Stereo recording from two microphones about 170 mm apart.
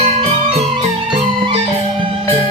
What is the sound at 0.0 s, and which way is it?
Music, 30° right (ahead or behind).